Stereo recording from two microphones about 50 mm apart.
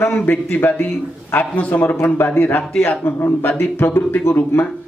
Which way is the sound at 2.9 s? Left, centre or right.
Left.